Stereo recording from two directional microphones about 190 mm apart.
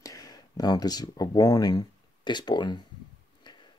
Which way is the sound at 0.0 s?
20° left (ahead or behind).